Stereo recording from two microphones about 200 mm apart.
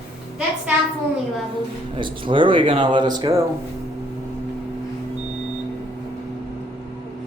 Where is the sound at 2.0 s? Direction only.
25° right (ahead or behind).